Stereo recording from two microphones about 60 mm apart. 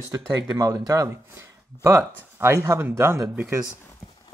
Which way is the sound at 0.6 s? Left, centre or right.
Right.